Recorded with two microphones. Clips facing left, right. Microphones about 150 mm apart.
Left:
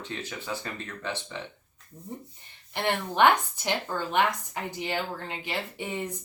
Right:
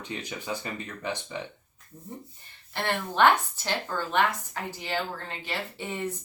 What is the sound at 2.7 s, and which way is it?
Speech, 15° left (ahead or behind).